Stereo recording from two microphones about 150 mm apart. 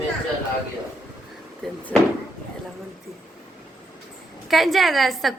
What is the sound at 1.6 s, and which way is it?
Door, 5° left (ahead or behind).